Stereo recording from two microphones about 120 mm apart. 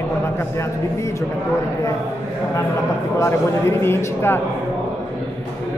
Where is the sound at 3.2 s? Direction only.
20° left (ahead or behind).